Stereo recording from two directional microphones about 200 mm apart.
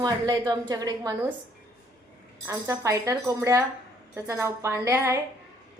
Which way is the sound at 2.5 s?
15° right (ahead or behind).